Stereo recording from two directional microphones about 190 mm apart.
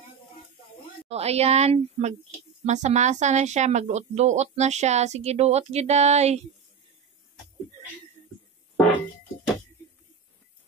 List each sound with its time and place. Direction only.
1.0 s speech: 35° right (ahead or behind)